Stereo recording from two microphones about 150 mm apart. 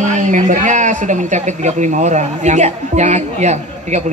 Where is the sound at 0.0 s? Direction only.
55° right (ahead or behind).